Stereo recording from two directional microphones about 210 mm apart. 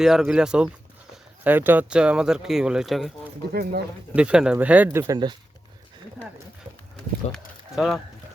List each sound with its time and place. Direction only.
0.0 s speech: centre (ahead or behind)
3.5 s speech: 45° right (ahead or behind)
4.1 s speech: 5° right (ahead or behind)
6.9 s speech: centre (ahead or behind)